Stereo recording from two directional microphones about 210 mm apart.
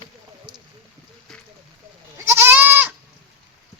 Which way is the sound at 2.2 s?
10° right (ahead or behind).